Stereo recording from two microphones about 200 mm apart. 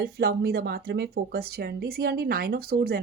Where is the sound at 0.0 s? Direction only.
50° right (ahead or behind).